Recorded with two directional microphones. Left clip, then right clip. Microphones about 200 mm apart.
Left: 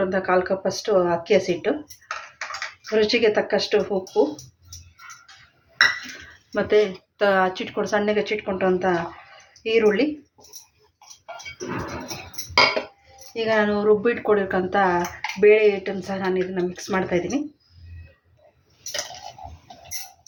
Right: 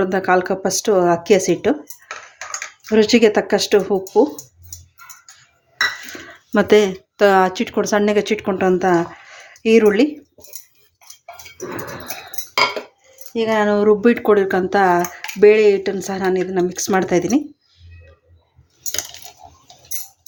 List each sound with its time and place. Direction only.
0.0 s speech: 60° right (ahead or behind)
2.9 s speech: 60° right (ahead or behind)
6.5 s speech: 55° right (ahead or behind)
13.3 s speech: 45° right (ahead or behind)